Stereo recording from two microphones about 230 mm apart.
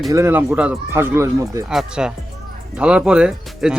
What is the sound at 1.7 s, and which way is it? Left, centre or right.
Speech, centre.